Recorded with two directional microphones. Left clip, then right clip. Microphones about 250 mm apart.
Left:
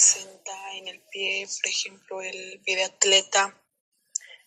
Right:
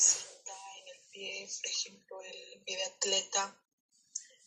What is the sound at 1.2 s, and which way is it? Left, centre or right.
A woman's voice, left.